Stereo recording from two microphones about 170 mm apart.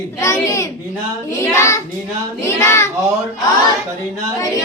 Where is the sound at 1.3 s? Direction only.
15° left (ahead or behind).